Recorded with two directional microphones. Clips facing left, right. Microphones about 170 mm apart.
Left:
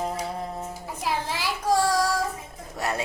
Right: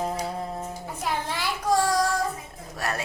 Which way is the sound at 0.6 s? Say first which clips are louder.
Even; 5° left (ahead or behind).